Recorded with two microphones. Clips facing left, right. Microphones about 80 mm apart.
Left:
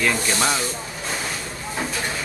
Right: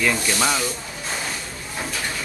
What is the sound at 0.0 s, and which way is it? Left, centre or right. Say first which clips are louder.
Speech: even; centre.